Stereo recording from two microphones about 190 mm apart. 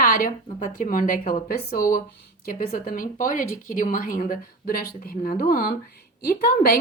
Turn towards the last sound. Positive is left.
turn(degrees=55)  # may be behind; listen again after turning